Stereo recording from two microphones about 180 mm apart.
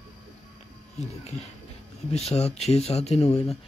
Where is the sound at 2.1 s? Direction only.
35° left (ahead or behind).